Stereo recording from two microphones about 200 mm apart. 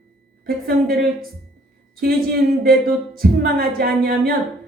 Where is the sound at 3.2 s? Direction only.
50° right (ahead or behind).